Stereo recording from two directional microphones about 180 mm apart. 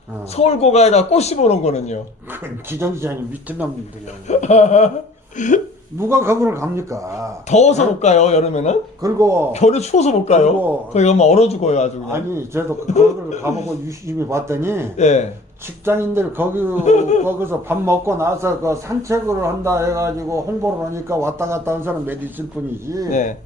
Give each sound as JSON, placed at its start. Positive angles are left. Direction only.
{"t": 0.3, "sound": "a man's voice", "side_deg": 35}
{"t": 2.7, "sound": "a man's voice", "side_deg": -15}
{"t": 4.3, "sound": "a man's voice", "side_deg": 40}
{"t": 6.0, "sound": "a man's voice", "side_deg": -15}
{"t": 7.5, "sound": "a man's voice", "side_deg": 40}
{"t": 9.0, "sound": "a man's voice", "side_deg": -20}
{"t": 9.5, "sound": "a man's voice", "side_deg": 35}
{"t": 12.1, "sound": "a man's voice", "side_deg": -15}
{"t": 12.9, "sound": "a man's voice", "side_deg": 40}
{"t": 14.2, "sound": "a man's voice", "side_deg": -15}
{"t": 14.9, "sound": "a man's voice", "side_deg": 40}
{"t": 15.8, "sound": "a man's voice", "side_deg": -15}
{"t": 16.8, "sound": "a man's voice", "side_deg": 40}
{"t": 17.2, "sound": "a man's voice", "side_deg": -15}